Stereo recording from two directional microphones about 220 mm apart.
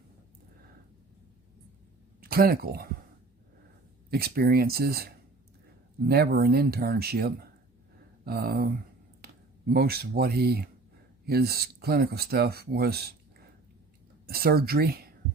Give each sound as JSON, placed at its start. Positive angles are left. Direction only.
{"t": 2.2, "sound": "speech", "side_deg": -45}
{"t": 4.1, "sound": "speech", "side_deg": -45}
{"t": 14.3, "sound": "speech", "side_deg": -45}